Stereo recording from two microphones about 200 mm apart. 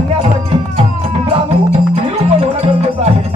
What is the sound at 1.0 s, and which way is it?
Music, 30° right (ahead or behind).